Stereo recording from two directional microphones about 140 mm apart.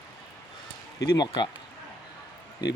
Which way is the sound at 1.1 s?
30° left (ahead or behind).